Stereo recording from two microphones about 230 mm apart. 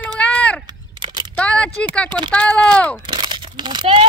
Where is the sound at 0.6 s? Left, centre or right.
Centre.